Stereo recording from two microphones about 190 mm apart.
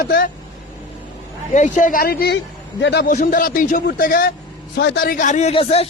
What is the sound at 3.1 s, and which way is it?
A man's voice, 45° left (ahead or behind).